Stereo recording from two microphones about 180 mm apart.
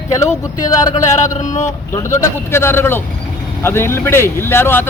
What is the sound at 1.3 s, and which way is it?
Speech, 40° left (ahead or behind).